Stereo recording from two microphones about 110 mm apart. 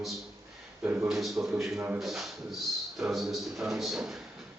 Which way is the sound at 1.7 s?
15° right (ahead or behind).